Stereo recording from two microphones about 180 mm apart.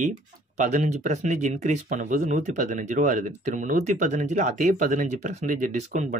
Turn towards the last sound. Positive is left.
turn(degrees=-40)  # may be behind; listen again after turning